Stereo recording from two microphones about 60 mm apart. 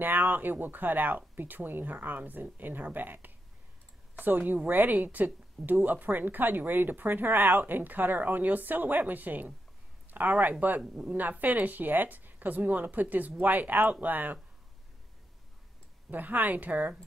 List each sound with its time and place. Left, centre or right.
0.0 s speech: right
16.1 s speech: right